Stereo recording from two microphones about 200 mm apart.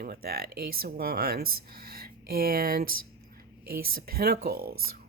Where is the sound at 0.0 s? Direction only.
50° right (ahead or behind).